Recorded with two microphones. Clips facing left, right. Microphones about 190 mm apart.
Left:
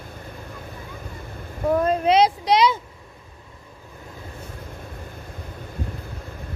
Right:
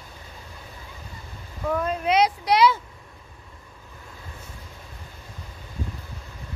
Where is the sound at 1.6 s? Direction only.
35° left (ahead or behind); by 2.8 s 20° left (ahead or behind).